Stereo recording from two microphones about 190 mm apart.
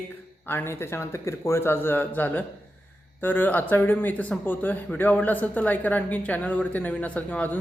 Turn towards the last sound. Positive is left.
turn(degrees=5)  # may be behind; listen again after turning